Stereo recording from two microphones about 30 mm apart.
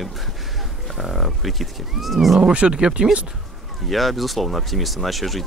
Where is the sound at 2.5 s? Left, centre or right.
Right.